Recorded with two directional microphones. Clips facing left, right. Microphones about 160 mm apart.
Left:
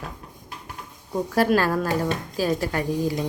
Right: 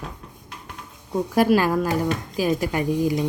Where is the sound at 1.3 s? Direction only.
15° right (ahead or behind).